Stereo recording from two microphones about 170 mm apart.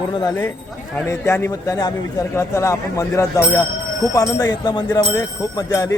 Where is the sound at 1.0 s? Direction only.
15° left (ahead or behind).